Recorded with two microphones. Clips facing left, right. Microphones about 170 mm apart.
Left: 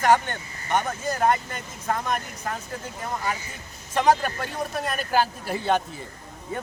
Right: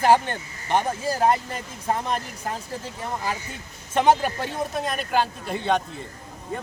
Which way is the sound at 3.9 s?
25° right (ahead or behind).